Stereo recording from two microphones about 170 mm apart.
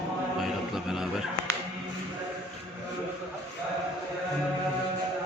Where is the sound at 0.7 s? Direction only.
Centre (ahead or behind).